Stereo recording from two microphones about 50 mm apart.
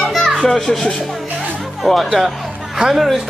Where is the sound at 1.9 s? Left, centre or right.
Centre.